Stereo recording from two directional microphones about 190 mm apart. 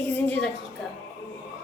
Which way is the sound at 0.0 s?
10° left (ahead or behind).